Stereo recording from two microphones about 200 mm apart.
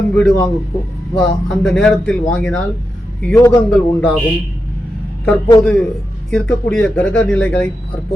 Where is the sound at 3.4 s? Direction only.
15° left (ahead or behind).